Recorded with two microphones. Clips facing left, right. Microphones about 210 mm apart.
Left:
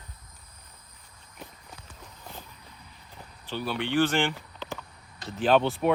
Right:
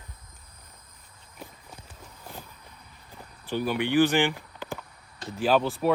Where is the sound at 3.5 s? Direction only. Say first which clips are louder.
Right 4 dB; 15° right (ahead or behind).